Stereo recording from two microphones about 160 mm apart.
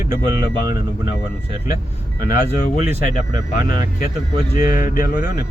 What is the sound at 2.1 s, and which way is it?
Speech, 60° left (ahead or behind).